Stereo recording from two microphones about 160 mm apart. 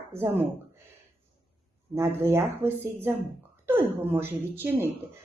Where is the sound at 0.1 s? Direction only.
15° right (ahead or behind).